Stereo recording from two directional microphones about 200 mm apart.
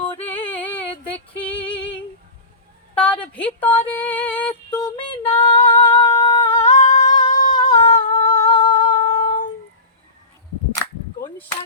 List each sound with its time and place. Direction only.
0.3 s music: 10° left (ahead or behind)
1.4 s female singing: 5° left (ahead or behind)
2.9 s a sound: 5° left (ahead or behind)
4.8 s female singing: 25° left (ahead or behind)
5.4 s singing: 20° left (ahead or behind)
6.6 s singing: 35° left (ahead or behind)
7.3 s a sound: 20° left (ahead or behind)
7.6 s a sound: 35° left (ahead or behind)
8.1 s humming: 20° left (ahead or behind)
9.0 s humming: 30° left (ahead or behind)